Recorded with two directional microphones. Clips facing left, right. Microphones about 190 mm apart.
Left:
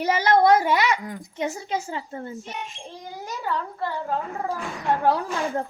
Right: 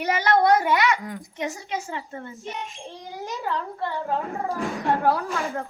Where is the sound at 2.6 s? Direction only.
Centre (ahead or behind).